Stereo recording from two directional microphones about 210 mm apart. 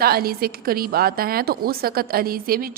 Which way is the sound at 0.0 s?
45° right (ahead or behind).